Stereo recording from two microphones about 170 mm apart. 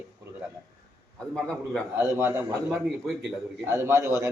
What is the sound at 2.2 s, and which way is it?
A man's voice, 15° right (ahead or behind).